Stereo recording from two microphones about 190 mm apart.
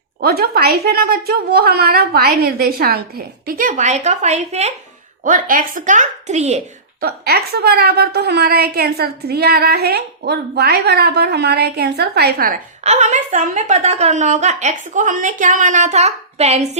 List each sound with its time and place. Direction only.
0.2 s a woman's voice: 55° right (ahead or behind); by 4.7 s 35° right (ahead or behind)
5.2 s speech: 45° right (ahead or behind)
7.0 s a woman's voice: 55° right (ahead or behind)
12.8 s speech: 40° right (ahead or behind)